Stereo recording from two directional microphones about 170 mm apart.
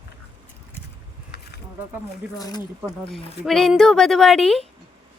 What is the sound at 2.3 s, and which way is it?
Speech, 25° left (ahead or behind).